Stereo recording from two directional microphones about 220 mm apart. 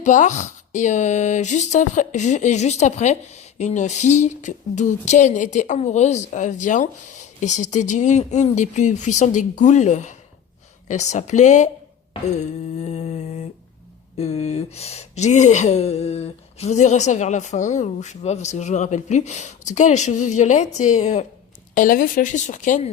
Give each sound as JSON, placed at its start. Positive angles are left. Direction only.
{"t": 0.0, "sound": "speech", "side_deg": 35}
{"t": 12.4, "sound": "a sound", "side_deg": 30}
{"t": 14.2, "sound": "speech", "side_deg": 30}